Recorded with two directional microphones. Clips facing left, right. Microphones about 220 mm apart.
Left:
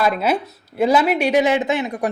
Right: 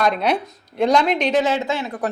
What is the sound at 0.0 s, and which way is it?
Speech, 5° left (ahead or behind).